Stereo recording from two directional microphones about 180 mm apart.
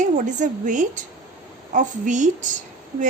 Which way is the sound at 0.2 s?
45° right (ahead or behind).